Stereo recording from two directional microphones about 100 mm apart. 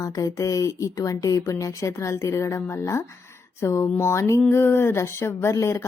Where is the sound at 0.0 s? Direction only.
35° left (ahead or behind).